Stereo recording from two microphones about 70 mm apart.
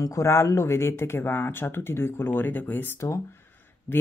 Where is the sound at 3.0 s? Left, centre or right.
Left.